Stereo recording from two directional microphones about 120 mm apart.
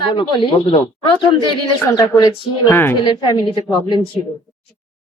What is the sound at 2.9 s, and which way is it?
Speech, 40° left (ahead or behind).